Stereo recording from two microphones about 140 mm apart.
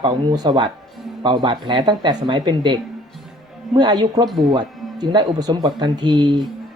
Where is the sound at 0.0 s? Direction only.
30° right (ahead or behind).